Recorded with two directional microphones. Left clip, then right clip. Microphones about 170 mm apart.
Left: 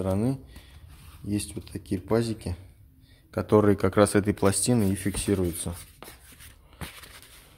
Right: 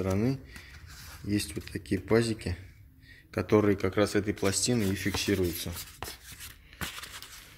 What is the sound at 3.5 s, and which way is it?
Speech, 30° left (ahead or behind).